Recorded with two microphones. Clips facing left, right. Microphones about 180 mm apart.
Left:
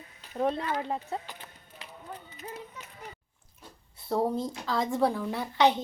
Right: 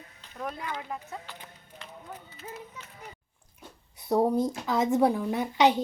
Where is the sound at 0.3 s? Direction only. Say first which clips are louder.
Left 7 dB; 30° left (ahead or behind).